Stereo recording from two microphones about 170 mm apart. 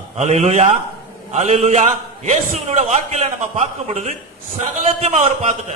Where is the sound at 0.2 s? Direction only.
45° right (ahead or behind).